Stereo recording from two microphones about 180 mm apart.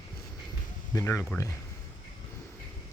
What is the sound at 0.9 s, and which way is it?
Speech, 15° left (ahead or behind).